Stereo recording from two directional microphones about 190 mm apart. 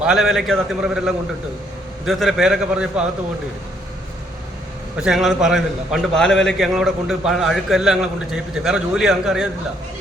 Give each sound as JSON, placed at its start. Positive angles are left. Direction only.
{"t": 0.0, "sound": "a man's voice", "side_deg": 0}
{"t": 4.9, "sound": "a man's voice", "side_deg": 0}